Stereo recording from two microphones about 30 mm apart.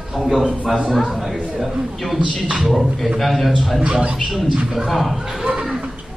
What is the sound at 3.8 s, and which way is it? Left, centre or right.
Speech, right.